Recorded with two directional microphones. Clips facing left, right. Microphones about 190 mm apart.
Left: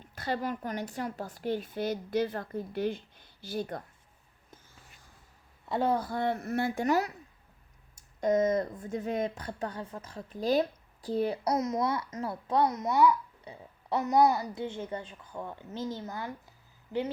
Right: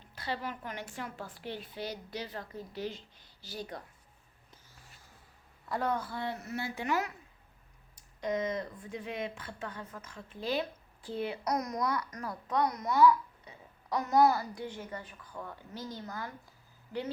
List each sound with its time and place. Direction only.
0.2 s a woman's voice: 45° left (ahead or behind)
5.6 s a woman's voice: 25° left (ahead or behind)
6.0 s a woman's voice: 45° left (ahead or behind)
8.2 s a woman's voice: 45° left (ahead or behind)
11.5 s a child's voice: 25° left (ahead or behind)
13.4 s burping: 35° left (ahead or behind)
14.0 s a child's voice: 20° left (ahead or behind)